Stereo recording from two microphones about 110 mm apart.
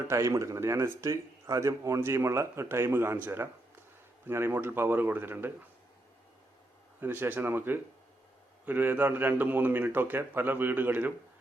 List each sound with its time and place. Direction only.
0.1 s speech: 30° right (ahead or behind)
7.0 s a man's voice: 20° right (ahead or behind)